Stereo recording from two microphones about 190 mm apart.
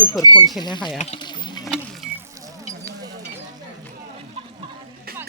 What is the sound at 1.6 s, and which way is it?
Wild animals, centre (ahead or behind).